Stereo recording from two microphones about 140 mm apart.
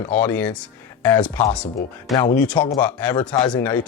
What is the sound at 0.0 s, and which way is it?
Speech, 10° left (ahead or behind).